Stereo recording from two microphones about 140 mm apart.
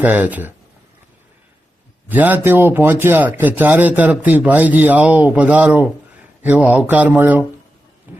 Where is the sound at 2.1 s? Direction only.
10° right (ahead or behind).